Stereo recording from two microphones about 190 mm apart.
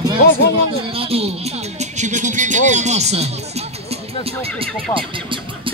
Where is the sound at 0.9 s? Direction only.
30° right (ahead or behind).